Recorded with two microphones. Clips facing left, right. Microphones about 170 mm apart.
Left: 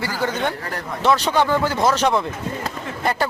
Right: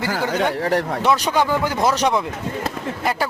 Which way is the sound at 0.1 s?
85° right.